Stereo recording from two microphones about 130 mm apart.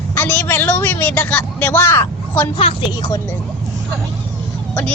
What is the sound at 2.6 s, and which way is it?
Speech, 50° left (ahead or behind).